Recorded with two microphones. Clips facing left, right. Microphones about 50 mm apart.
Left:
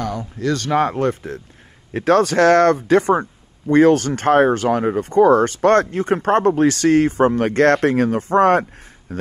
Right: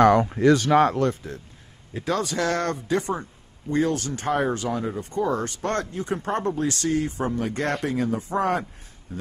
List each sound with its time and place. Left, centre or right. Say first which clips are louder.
0.0 s speech: right 9 dB; right
0.7 s speech: even; centre
0.9 s speech: left 4 dB; left
2.0 s speech: left 11 dB; left
3.8 s speech: left 12 dB; left
9.1 s a sound: left 8 dB; left